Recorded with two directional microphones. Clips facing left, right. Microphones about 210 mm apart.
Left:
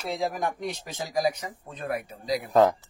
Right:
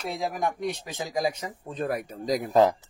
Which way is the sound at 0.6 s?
20° right (ahead or behind).